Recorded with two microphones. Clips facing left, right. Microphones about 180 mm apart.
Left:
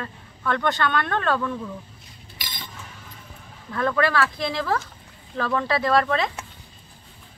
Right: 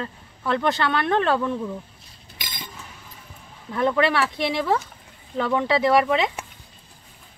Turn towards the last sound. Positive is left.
turn(degrees=-15)  # may be behind; listen again after turning